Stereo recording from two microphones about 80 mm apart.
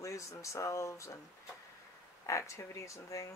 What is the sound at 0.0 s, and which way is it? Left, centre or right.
Speech, left.